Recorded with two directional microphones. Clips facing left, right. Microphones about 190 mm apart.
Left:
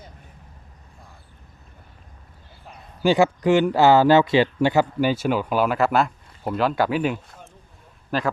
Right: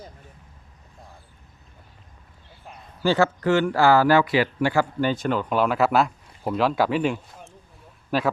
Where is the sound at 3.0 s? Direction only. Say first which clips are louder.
Left 3 dB; 15° left (ahead or behind).